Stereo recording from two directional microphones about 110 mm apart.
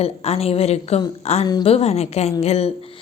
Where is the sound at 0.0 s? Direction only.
65° left (ahead or behind).